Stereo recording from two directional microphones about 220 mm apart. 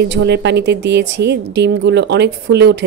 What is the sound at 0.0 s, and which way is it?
A woman's voice, 50° right (ahead or behind).